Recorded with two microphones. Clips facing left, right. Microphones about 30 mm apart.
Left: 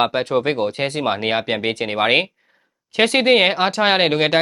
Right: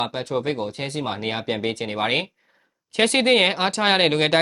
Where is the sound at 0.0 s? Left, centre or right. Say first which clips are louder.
Left 6 dB; left.